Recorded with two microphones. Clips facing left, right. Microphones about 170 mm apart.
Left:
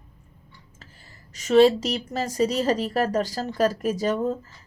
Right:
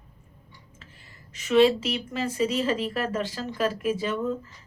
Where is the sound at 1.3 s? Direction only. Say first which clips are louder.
Left 3 dB; 40° left (ahead or behind).